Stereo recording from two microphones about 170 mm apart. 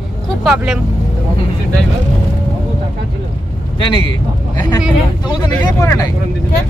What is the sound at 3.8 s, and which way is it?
Speech, 30° left (ahead or behind).